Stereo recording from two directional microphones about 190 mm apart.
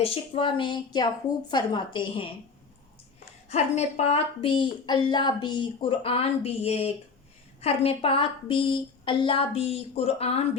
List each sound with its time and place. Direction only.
0.0 s a woman's voice: 30° left (ahead or behind)
3.5 s a woman's voice: 35° left (ahead or behind)